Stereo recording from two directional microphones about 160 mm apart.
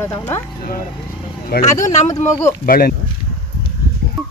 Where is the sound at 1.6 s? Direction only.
45° left (ahead or behind).